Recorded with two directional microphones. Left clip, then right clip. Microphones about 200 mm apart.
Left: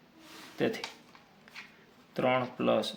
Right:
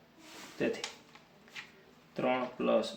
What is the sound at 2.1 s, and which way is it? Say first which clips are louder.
Speech: left 3 dB; 35° left (ahead or behind).